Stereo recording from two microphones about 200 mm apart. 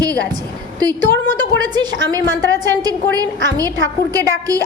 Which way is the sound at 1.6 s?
20° right (ahead or behind).